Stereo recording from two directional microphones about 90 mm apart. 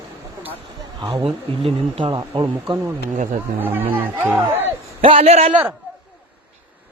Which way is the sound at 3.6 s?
25° right (ahead or behind).